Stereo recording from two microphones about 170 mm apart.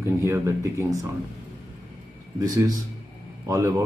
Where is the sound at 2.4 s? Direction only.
20° right (ahead or behind).